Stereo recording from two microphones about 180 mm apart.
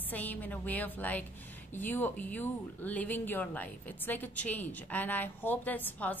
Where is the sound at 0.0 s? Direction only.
10° left (ahead or behind).